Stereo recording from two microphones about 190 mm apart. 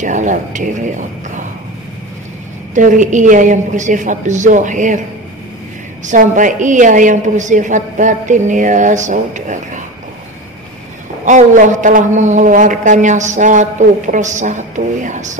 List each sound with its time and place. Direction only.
0.0 s a man's voice: 40° right (ahead or behind)
2.7 s a man's voice: 40° right (ahead or behind)
6.0 s a man's voice: 45° right (ahead or behind)
11.2 s a man's voice: 40° right (ahead or behind)